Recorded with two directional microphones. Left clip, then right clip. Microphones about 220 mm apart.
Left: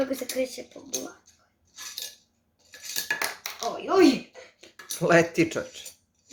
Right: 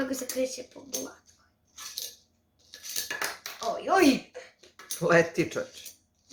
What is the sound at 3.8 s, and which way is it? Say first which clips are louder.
Speech: left 2 dB; 25° right (ahead or behind).